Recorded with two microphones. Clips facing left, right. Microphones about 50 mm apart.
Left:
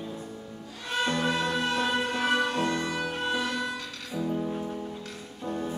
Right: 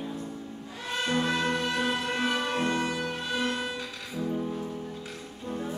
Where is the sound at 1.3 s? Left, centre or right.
Right.